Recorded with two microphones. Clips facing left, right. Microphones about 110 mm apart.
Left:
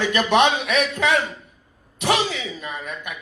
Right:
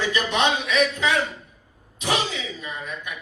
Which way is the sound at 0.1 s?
65° left (ahead or behind).